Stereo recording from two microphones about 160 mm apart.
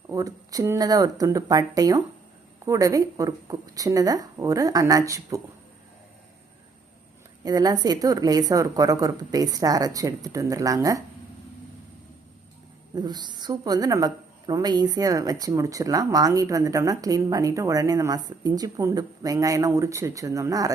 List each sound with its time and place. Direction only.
0.1 s a woman's voice: 20° right (ahead or behind)
7.4 s a woman's voice: 25° right (ahead or behind)
13.0 s a woman's voice: 25° right (ahead or behind)